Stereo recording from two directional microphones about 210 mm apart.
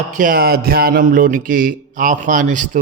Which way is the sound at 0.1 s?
40° right (ahead or behind).